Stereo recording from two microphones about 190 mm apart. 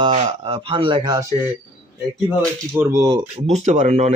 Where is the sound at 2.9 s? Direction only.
20° right (ahead or behind).